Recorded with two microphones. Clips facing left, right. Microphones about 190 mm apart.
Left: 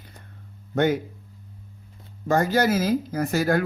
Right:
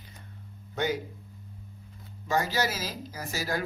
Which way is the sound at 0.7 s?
55° left (ahead or behind).